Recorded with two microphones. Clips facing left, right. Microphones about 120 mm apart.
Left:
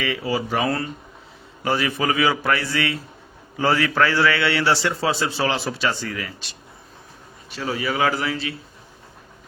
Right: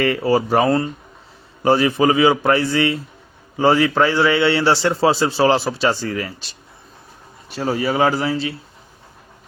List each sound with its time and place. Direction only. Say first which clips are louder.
0.0 s speech: right 7 dB; 45° right (ahead or behind)
1.6 s a man's voice: right 7 dB; 30° right (ahead or behind)
7.5 s a man's voice: right 5 dB; 45° right (ahead or behind)